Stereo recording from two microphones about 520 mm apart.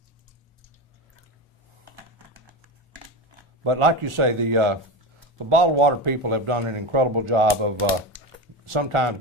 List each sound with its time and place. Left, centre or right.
3.6 s speech: right